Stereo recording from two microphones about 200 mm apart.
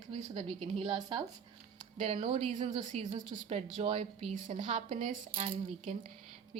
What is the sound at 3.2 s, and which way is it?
Speech, 20° right (ahead or behind).